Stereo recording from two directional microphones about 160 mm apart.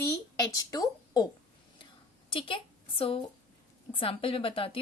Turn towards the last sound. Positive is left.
turn(degrees=35)  # may be behind; listen again after turning